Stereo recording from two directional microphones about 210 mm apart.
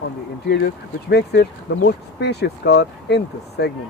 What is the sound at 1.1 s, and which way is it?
Speech, 50° left (ahead or behind).